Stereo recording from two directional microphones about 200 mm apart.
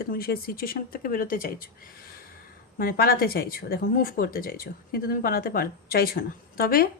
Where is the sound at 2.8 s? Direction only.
50° left (ahead or behind).